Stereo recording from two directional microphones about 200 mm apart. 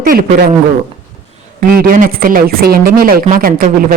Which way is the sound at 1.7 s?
45° right (ahead or behind).